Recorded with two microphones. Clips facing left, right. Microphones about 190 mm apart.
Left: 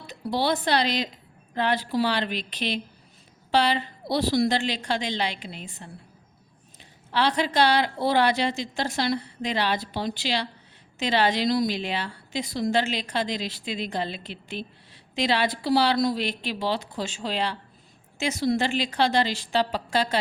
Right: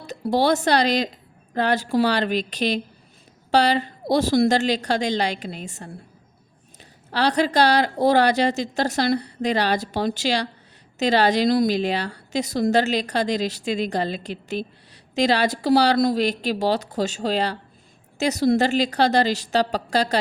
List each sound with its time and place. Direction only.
0.1 s a woman's voice: 45° right (ahead or behind)
7.1 s a woman's voice: 40° right (ahead or behind)